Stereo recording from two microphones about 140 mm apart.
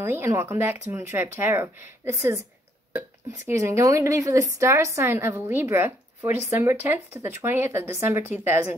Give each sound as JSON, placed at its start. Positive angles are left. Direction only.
{"t": 0.0, "sound": "speech", "side_deg": -20}